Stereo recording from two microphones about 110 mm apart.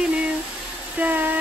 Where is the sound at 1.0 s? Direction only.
15° right (ahead or behind).